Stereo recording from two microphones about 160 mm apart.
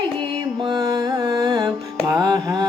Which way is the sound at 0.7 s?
25° right (ahead or behind).